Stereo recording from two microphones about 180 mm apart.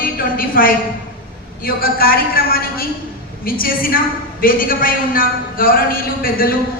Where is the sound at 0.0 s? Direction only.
50° left (ahead or behind).